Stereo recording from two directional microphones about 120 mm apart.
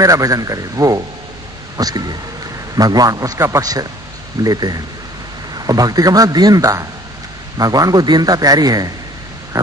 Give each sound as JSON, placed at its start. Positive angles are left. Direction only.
{"t": 0.0, "sound": "a man's voice", "side_deg": -30}